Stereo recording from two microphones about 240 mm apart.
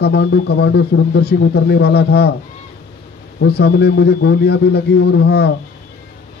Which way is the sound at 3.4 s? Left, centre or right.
Left.